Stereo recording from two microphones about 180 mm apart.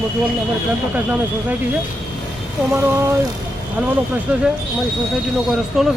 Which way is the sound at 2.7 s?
15° right (ahead or behind).